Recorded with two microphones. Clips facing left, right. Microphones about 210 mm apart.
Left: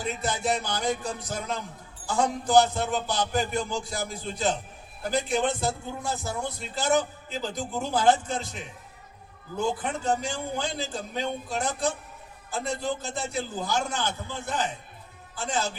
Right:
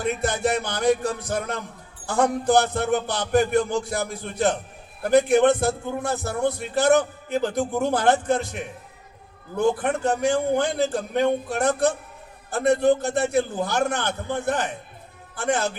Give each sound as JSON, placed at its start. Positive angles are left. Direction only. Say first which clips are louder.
{"t": 0.0, "sound": "a man's voice", "louder": "right 6 dB", "side_deg": -60}